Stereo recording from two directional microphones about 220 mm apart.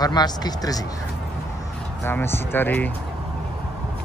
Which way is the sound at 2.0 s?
10° left (ahead or behind).